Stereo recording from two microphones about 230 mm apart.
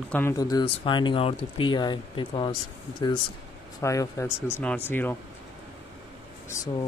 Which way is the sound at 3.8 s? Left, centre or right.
Centre.